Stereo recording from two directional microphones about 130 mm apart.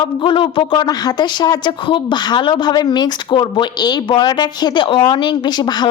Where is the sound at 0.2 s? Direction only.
40° left (ahead or behind).